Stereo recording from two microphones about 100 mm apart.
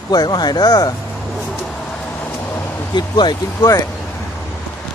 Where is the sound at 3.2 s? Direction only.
40° left (ahead or behind).